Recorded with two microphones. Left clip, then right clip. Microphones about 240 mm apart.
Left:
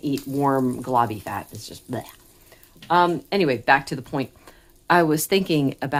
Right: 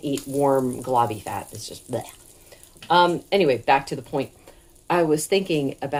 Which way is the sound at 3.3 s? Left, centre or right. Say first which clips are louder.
Even; left.